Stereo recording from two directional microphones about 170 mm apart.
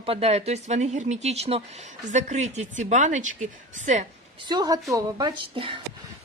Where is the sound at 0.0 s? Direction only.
35° right (ahead or behind).